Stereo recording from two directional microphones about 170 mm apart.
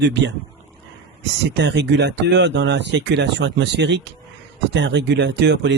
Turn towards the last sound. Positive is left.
turn(degrees=-90)